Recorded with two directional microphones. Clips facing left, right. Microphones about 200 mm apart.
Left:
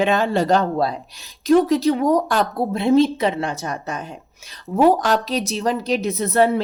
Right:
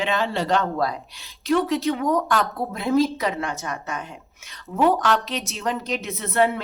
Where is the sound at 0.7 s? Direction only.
30° left (ahead or behind).